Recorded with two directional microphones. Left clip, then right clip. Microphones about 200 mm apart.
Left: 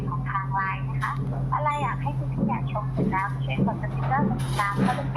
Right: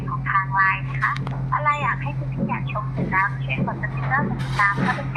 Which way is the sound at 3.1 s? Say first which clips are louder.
Right 9 dB; 15° left (ahead or behind).